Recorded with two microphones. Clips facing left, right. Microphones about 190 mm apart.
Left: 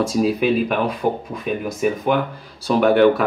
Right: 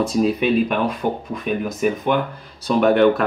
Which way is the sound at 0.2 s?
5° left (ahead or behind).